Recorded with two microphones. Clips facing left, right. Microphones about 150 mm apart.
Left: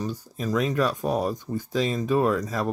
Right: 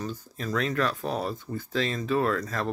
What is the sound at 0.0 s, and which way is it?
Speech, 10° left (ahead or behind).